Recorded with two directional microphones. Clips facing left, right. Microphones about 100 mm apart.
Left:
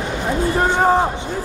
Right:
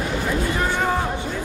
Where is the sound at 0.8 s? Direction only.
35° left (ahead or behind).